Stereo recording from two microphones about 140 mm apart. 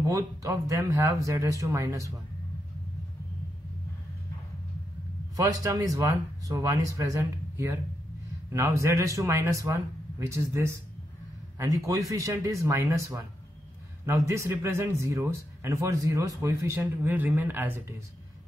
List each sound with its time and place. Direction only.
0.0 s a man's voice: 20° right (ahead or behind)
5.3 s a man's voice: 25° right (ahead or behind)